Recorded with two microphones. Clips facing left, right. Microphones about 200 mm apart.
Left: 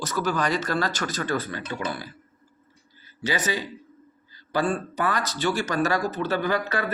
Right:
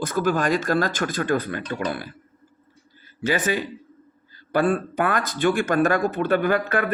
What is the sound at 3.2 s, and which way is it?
A man's voice, 50° right (ahead or behind).